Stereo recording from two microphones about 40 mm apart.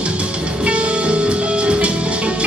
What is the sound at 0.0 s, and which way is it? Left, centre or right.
Music, right.